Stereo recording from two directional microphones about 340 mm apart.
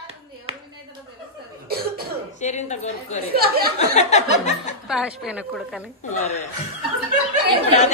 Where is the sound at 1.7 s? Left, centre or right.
Right.